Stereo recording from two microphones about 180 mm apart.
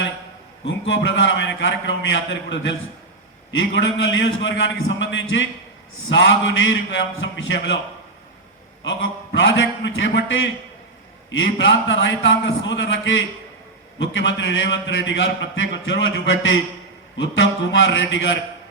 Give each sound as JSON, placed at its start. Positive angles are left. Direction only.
{"t": 0.9, "sound": "a man's voice", "side_deg": 90}
{"t": 8.8, "sound": "a man's voice", "side_deg": 90}